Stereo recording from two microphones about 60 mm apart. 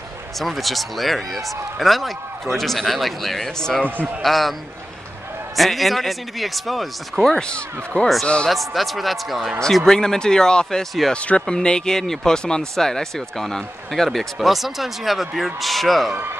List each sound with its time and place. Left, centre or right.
0.4 s speech: centre
5.6 s speech: centre
7.3 s speech: centre
8.5 s speech: centre
11.1 s speech: left; by 16.2 s centre